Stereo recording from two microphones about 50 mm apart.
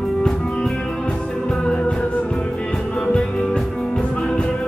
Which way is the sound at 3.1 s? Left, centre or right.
Centre.